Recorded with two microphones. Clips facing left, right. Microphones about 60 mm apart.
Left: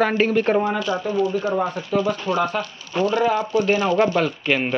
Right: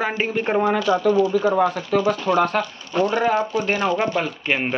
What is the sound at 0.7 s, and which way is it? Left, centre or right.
Speech, right.